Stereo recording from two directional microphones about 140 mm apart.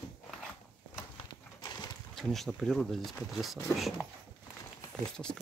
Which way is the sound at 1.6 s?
30° left (ahead or behind).